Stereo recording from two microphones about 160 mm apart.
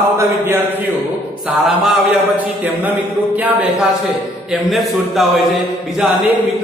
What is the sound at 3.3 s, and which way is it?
A man's voice, 10° right (ahead or behind).